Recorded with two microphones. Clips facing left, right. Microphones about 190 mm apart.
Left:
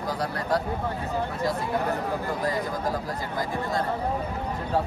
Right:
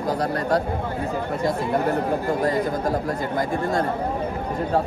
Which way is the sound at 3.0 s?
55° right (ahead or behind).